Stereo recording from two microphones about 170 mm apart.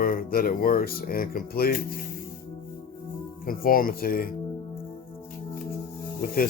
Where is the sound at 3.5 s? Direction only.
60° left (ahead or behind).